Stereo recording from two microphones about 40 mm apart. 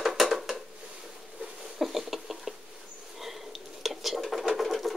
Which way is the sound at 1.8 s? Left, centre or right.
Centre.